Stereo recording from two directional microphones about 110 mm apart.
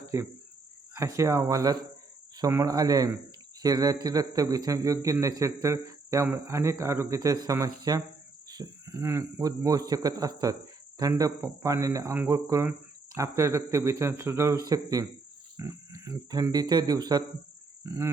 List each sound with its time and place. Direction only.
0.1 s a man's voice: 30° right (ahead or behind)
9.4 s a man's voice: 35° right (ahead or behind)
17.8 s speech: 25° right (ahead or behind)